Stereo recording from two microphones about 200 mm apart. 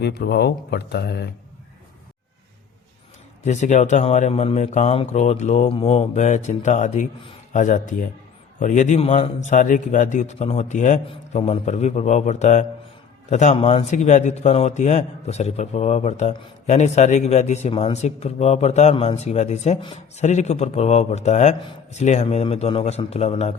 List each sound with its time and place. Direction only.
0.0 s speech: 55° left (ahead or behind)
3.4 s a man's voice: 35° left (ahead or behind)